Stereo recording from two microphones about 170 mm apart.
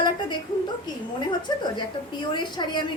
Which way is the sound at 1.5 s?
25° left (ahead or behind).